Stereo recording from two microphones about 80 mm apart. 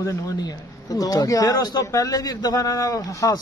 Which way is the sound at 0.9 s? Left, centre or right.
Left.